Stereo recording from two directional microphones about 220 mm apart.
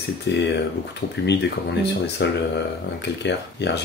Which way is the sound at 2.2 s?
50° left (ahead or behind).